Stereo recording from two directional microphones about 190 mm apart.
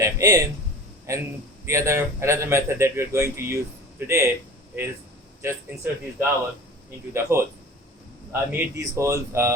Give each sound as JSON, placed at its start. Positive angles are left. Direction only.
{"t": 0.0, "sound": "a sound", "side_deg": -15}
{"t": 1.1, "sound": "a man's voice", "side_deg": -15}
{"t": 5.4, "sound": "a man's voice", "side_deg": -15}